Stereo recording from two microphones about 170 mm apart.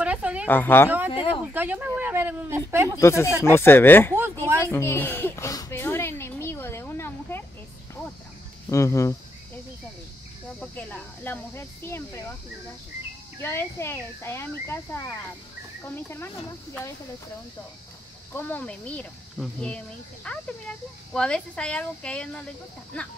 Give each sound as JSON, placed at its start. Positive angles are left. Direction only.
{"t": 0.0, "sound": "a sound", "side_deg": -10}
{"t": 0.5, "sound": "speech", "side_deg": 10}
{"t": 0.8, "sound": "a sound", "side_deg": -10}
{"t": 1.5, "sound": "speech", "side_deg": -10}
{"t": 3.0, "sound": "speech", "side_deg": 15}
{"t": 4.6, "sound": "a sound", "side_deg": 15}
{"t": 8.6, "sound": "speech", "side_deg": 15}
{"t": 10.6, "sound": "speech", "side_deg": 10}
{"t": 13.4, "sound": "speech", "side_deg": 15}
{"t": 18.3, "sound": "a child's voice", "side_deg": 10}